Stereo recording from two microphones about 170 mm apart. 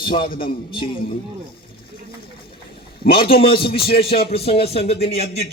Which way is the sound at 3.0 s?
60° left (ahead or behind).